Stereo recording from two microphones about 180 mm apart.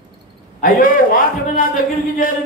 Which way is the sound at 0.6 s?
50° left (ahead or behind).